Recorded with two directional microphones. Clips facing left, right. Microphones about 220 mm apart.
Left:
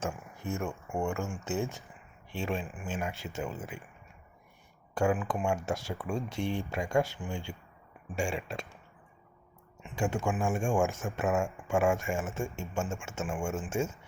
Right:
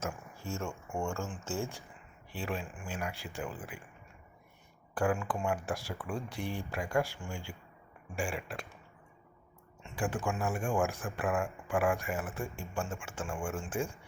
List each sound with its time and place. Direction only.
0.3 s speech: 20° left (ahead or behind)
4.9 s speech: 20° left (ahead or behind)
9.8 s speech: 20° left (ahead or behind)